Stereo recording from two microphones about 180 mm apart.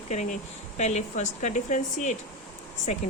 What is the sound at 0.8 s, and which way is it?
Speech, 40° left (ahead or behind).